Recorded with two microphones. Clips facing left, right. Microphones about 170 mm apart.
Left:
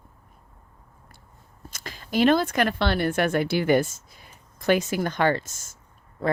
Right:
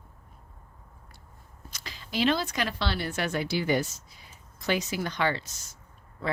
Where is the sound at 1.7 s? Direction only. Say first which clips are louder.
Left 6 dB; 50° left (ahead or behind).